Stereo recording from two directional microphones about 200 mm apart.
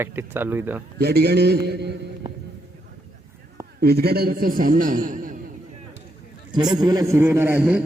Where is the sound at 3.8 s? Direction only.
50° right (ahead or behind).